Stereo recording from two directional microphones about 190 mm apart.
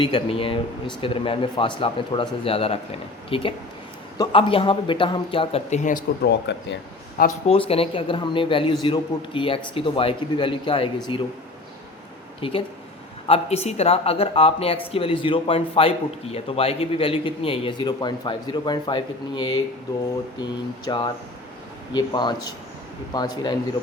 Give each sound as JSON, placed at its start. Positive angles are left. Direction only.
{"t": 0.0, "sound": "speech", "side_deg": 25}
{"t": 6.2, "sound": "speech", "side_deg": 65}
{"t": 7.2, "sound": "speech", "side_deg": 40}
{"t": 7.5, "sound": "speech", "side_deg": 30}
{"t": 12.4, "sound": "speech", "side_deg": 30}
{"t": 20.8, "sound": "speech", "side_deg": 25}